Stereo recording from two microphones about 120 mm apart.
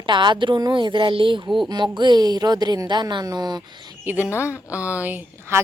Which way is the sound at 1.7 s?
40° right (ahead or behind).